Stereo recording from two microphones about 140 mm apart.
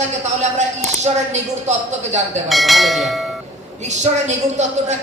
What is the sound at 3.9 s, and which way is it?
A woman's voice, 55° right (ahead or behind).